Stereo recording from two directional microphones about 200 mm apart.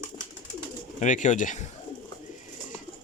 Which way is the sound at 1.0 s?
40° left (ahead or behind).